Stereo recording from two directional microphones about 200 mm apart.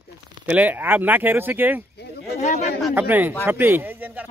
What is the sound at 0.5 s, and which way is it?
Speech, 10° right (ahead or behind).